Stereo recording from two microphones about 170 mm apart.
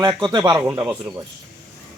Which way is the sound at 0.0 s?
25° right (ahead or behind).